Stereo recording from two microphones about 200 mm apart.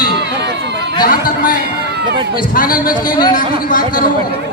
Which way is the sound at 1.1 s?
45° left (ahead or behind).